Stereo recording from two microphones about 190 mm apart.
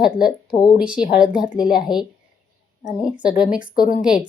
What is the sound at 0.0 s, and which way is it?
Speech, 5° right (ahead or behind).